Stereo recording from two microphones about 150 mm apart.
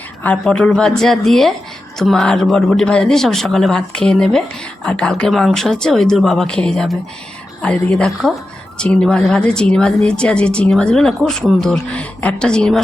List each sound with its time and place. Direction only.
0.2 s speech: 5° left (ahead or behind)